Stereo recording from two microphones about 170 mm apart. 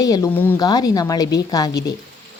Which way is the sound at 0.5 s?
25° left (ahead or behind).